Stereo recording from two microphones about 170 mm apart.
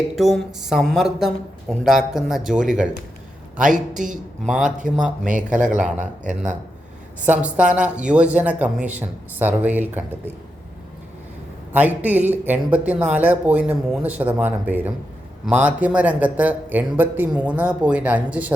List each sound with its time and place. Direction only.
0.2 s speech: centre (ahead or behind)
3.6 s speech: 50° right (ahead or behind)
4.4 s speech: 5° right (ahead or behind)
5.2 s speech: 50° right (ahead or behind)
7.3 s speech: 10° right (ahead or behind)
11.7 s speech: 10° right (ahead or behind)